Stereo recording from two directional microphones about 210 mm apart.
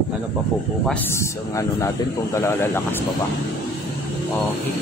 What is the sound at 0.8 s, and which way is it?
A man's voice, 10° left (ahead or behind).